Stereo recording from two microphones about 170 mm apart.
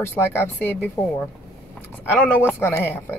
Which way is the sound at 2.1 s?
10° left (ahead or behind).